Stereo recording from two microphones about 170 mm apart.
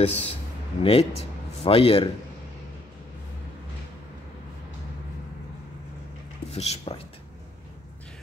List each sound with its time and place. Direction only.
0.0 s speech: 35° left (ahead or behind)
6.5 s speech: 35° left (ahead or behind)